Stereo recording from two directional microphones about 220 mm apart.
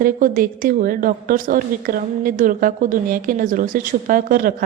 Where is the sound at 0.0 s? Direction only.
40° right (ahead or behind).